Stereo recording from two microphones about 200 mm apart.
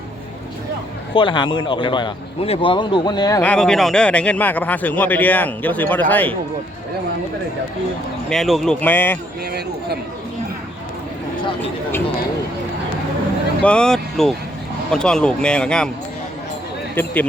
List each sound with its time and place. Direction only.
1.1 s speech: 25° left (ahead or behind)
3.4 s a man's voice: 5° left (ahead or behind)
8.3 s speech: centre (ahead or behind)
9.5 s speech: 55° right (ahead or behind)
13.6 s speech: 5° left (ahead or behind)
16.9 s a man's voice: 10° left (ahead or behind)